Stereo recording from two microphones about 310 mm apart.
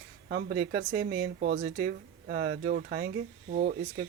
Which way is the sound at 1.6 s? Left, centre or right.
Right.